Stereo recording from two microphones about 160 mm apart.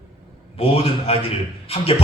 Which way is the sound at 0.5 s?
35° left (ahead or behind).